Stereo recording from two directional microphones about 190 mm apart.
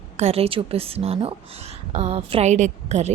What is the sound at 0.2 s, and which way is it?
Speech, 35° right (ahead or behind).